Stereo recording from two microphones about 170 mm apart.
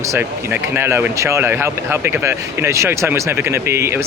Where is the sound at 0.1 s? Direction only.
10° right (ahead or behind).